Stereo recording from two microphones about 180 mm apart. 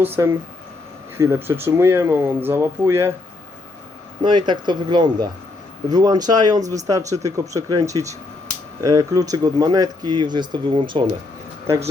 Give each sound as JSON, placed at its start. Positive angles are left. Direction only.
{"t": 0.0, "sound": "speech", "side_deg": -10}
{"t": 4.2, "sound": "speech", "side_deg": -25}